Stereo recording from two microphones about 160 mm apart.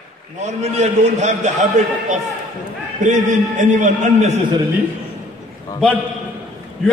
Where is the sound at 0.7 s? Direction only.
45° right (ahead or behind).